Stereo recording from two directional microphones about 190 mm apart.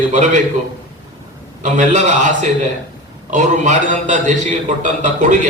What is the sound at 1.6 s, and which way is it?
A man's voice, 40° right (ahead or behind).